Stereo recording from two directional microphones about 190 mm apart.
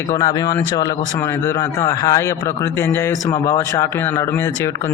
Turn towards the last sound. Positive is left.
turn(degrees=15)  # may be behind; listen again after turning